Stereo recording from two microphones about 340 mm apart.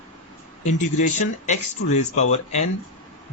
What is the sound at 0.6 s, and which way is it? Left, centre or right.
Speech, left.